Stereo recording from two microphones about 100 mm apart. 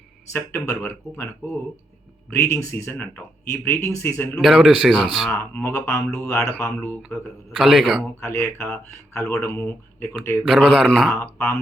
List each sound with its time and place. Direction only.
0.3 s speech: 25° left (ahead or behind)
4.4 s speech: 5° right (ahead or behind)
5.3 s speech: 20° left (ahead or behind)
7.5 s speech: 5° right (ahead or behind)
8.2 s speech: 25° left (ahead or behind)
10.4 s speech: centre (ahead or behind)
10.8 s speech: 10° right (ahead or behind)
11.2 s speech: 20° left (ahead or behind)